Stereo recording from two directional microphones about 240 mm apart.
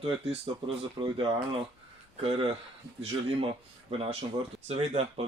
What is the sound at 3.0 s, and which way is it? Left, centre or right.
Speech, right.